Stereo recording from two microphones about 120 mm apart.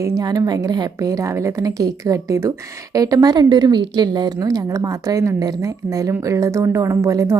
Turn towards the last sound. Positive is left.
turn(degrees=-25)  # may be behind; listen again after turning